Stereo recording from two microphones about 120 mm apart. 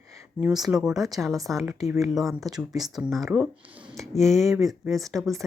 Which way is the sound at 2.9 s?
Centre (ahead or behind).